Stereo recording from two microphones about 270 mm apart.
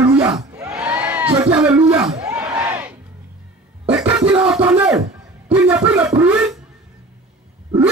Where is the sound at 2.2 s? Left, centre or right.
Centre.